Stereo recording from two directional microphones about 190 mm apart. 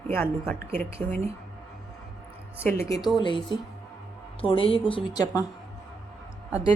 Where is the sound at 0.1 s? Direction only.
10° left (ahead or behind).